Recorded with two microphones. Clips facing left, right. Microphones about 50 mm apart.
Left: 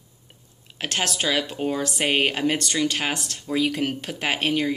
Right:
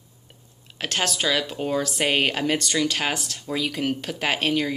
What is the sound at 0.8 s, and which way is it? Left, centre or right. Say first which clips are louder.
Speech: even; left.